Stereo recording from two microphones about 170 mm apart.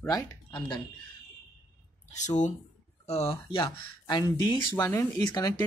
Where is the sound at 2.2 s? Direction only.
45° left (ahead or behind).